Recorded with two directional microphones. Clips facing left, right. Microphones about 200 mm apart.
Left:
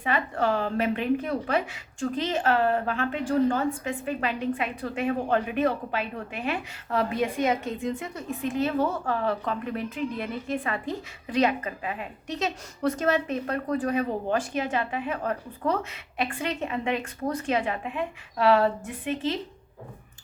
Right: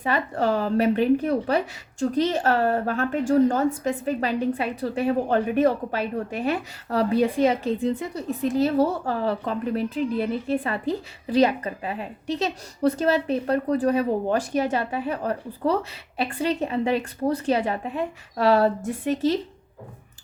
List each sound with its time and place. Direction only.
0.0 s speech: 40° right (ahead or behind)